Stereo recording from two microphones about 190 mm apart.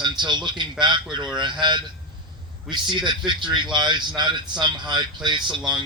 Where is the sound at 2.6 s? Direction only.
25° right (ahead or behind).